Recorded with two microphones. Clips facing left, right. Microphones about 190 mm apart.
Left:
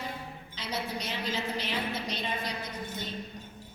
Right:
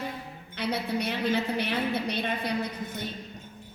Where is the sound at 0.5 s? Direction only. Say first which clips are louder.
Right 7 dB; 60° right (ahead or behind).